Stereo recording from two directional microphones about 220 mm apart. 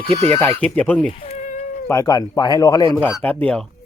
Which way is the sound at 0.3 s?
5° left (ahead or behind).